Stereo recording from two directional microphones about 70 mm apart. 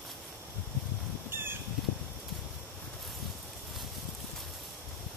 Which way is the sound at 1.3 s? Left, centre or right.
Right.